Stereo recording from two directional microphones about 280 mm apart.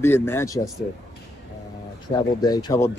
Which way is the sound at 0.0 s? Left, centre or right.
Centre.